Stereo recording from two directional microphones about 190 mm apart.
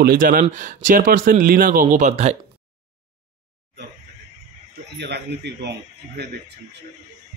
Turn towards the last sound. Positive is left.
turn(degrees=-60)  # may be behind; listen again after turning